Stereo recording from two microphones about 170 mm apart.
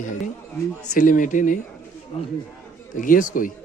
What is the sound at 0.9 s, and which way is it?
Speech, 50° left (ahead or behind).